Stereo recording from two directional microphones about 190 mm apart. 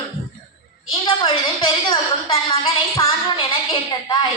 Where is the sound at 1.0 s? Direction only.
25° left (ahead or behind).